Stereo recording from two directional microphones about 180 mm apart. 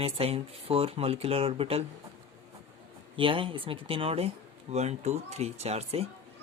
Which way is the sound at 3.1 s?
30° right (ahead or behind).